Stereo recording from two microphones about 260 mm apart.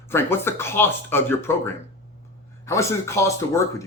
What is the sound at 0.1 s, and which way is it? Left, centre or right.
Speech, centre.